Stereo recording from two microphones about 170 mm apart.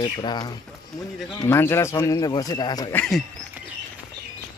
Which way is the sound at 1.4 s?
15° left (ahead or behind).